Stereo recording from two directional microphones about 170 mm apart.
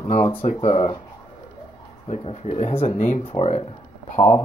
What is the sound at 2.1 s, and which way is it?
Speech, 40° left (ahead or behind).